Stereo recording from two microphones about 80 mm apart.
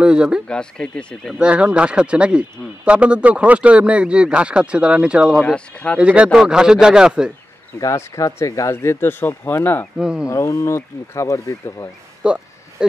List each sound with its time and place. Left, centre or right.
0.0 s speech: centre
0.5 s speech: centre
1.4 s speech: centre
5.4 s speech: centre
5.9 s speech: centre
7.8 s speech: left
9.0 s speech: left
9.9 s speech: centre
10.2 s speech: left
12.2 s speech: centre